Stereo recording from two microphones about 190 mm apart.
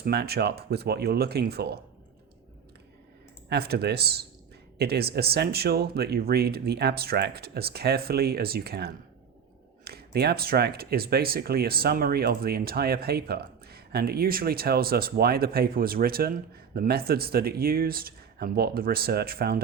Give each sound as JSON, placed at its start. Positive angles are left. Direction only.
{"t": 0.0, "sound": "speech", "side_deg": -60}
{"t": 3.5, "sound": "speech", "side_deg": -60}